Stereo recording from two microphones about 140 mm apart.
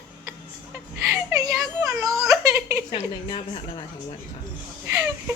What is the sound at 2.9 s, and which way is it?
Speech, 35° left (ahead or behind).